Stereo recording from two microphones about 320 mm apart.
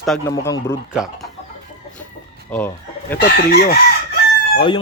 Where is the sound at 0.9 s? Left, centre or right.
Centre.